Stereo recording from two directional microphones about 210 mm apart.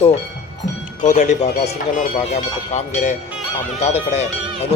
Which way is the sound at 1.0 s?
35° left (ahead or behind).